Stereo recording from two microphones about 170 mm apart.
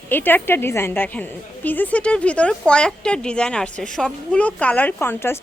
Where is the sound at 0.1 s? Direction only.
10° left (ahead or behind).